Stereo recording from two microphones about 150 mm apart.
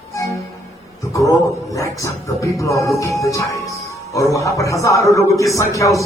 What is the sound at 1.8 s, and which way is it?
A man's voice, 20° left (ahead or behind).